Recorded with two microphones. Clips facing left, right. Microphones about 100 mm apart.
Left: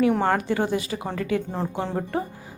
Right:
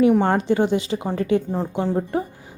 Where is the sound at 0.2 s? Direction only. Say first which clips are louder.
Right 4 dB; 25° right (ahead or behind).